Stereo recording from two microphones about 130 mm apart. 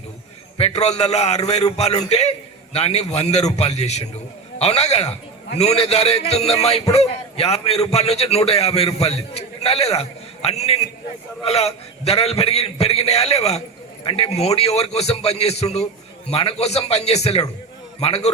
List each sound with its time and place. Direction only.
0.5 s a man's voice: 50° left (ahead or behind)